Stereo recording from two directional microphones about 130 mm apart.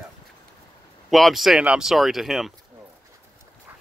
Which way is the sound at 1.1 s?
Centre (ahead or behind).